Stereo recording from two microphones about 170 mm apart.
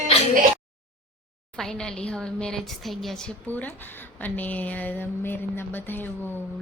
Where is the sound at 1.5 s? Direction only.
5° left (ahead or behind).